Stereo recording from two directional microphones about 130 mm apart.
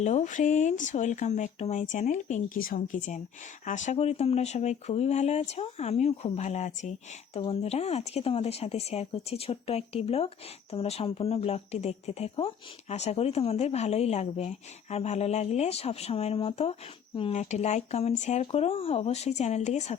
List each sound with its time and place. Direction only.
0.0 s speech: 65° left (ahead or behind); by 3.2 s 85° left
3.7 s speech: 70° left (ahead or behind)
3.9 s speech: 55° left (ahead or behind)
7.3 s speech: 50° left (ahead or behind)